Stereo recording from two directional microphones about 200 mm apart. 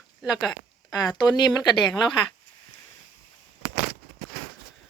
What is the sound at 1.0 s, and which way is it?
Speech, 20° left (ahead or behind).